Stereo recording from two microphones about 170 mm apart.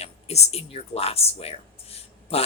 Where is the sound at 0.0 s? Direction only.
40° left (ahead or behind).